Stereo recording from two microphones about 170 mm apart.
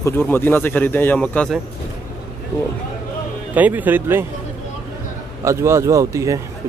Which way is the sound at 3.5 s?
10° right (ahead or behind).